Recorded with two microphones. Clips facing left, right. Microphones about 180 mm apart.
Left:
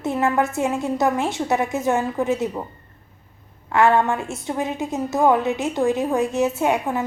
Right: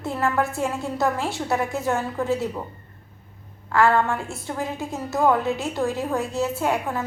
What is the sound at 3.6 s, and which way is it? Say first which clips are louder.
A woman's voice: left 2 dB; 20° left (ahead or behind).